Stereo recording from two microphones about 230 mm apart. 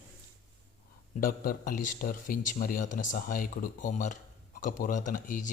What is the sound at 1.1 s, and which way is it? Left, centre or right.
A man's voice, left.